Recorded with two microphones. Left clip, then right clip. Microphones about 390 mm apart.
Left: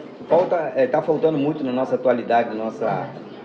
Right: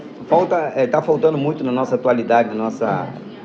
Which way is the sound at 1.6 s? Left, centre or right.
Centre.